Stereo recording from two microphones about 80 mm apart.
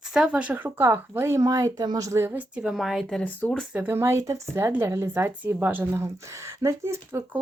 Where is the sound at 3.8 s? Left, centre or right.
Right.